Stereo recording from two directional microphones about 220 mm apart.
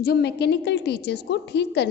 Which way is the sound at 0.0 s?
45° left (ahead or behind).